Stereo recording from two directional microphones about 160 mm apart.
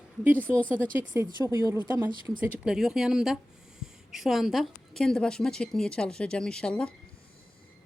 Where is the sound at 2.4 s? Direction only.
10° right (ahead or behind); by 6.9 s 5° left (ahead or behind).